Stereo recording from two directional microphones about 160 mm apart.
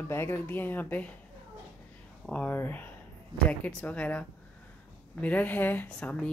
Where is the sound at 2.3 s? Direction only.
10° left (ahead or behind).